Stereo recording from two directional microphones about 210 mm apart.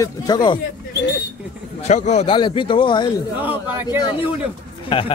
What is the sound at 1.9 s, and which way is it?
A man's voice, 35° left (ahead or behind).